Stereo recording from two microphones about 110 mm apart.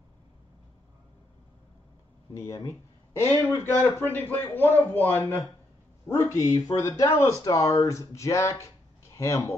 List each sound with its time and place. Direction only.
2.5 s speech: 30° left (ahead or behind)
6.0 s speech: 25° left (ahead or behind)